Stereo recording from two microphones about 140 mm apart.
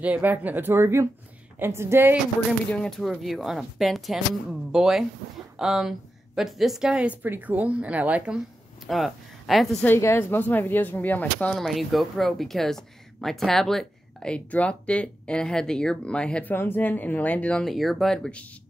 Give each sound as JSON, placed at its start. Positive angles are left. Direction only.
{"t": 0.0, "sound": "a woman's voice", "side_deg": -10}
{"t": 2.7, "sound": "a woman's voice", "side_deg": 5}
{"t": 8.8, "sound": "speech", "side_deg": 0}
{"t": 9.8, "sound": "speech", "side_deg": 15}
{"t": 11.5, "sound": "speech", "side_deg": 0}